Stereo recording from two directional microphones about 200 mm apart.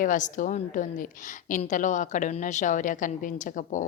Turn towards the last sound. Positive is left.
turn(degrees=40)  # may be behind; listen again after turning